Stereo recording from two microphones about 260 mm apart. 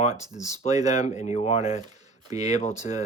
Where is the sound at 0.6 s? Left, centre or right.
Left.